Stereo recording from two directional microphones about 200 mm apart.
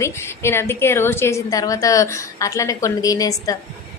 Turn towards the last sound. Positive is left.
turn(degrees=15)  # may be behind; listen again after turning